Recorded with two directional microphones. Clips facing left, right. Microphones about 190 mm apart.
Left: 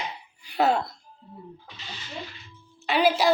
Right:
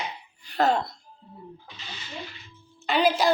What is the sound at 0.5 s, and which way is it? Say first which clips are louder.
Speech: even; 10° left (ahead or behind).